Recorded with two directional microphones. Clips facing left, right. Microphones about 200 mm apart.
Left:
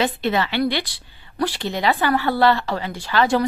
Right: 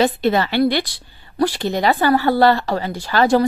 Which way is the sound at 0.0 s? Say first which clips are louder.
Right 4 dB; 40° right (ahead or behind).